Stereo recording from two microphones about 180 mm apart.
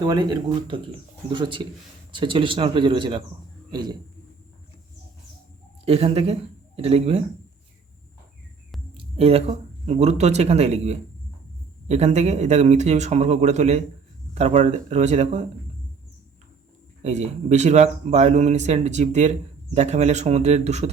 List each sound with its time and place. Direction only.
0.0 s speech: 25° right (ahead or behind)
5.8 s speech: 35° right (ahead or behind)
9.0 s speech: 35° right (ahead or behind)
17.0 s speech: 40° right (ahead or behind)